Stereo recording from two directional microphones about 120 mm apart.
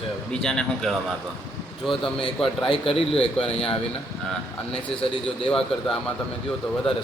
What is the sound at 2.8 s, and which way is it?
Speech, 50° left (ahead or behind).